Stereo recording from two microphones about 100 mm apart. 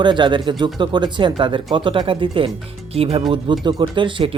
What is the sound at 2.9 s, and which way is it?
Speech, 70° right (ahead or behind).